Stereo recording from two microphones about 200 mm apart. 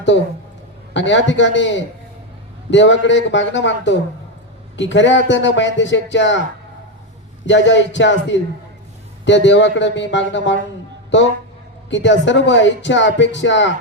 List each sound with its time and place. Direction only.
0.9 s speech: 65° left (ahead or behind)
7.4 s speech: 65° left (ahead or behind)
11.9 s speech: 65° left (ahead or behind)